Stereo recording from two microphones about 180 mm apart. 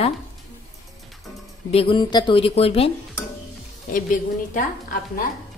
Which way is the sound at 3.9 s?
50° left (ahead or behind).